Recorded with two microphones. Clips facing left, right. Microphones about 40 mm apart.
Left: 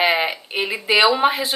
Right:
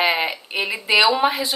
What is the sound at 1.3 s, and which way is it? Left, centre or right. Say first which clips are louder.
Speech: left 1 dB; left.